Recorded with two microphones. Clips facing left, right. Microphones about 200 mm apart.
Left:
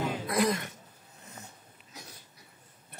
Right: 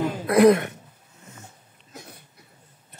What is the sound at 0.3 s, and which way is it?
Speech, 60° right (ahead or behind).